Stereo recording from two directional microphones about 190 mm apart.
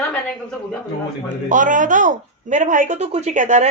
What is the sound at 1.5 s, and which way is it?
Speech, 45° right (ahead or behind).